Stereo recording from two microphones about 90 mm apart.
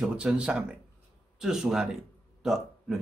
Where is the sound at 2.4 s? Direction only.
5° right (ahead or behind).